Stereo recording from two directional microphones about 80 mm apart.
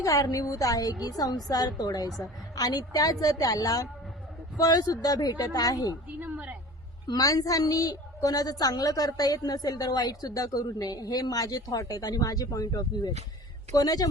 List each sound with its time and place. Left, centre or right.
0.0 s a woman's voice: left
6.1 s a sound: right
7.1 s a woman's voice: left